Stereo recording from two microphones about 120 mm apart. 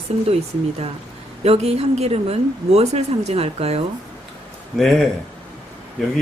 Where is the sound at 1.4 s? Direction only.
60° right (ahead or behind).